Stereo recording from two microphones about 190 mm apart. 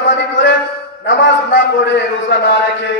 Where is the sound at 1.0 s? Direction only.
70° left (ahead or behind).